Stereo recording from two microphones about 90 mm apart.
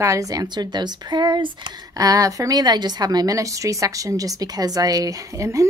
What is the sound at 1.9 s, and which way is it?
A woman's voice, 40° right (ahead or behind).